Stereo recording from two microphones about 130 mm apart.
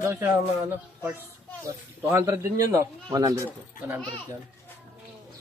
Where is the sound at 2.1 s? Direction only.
20° right (ahead or behind).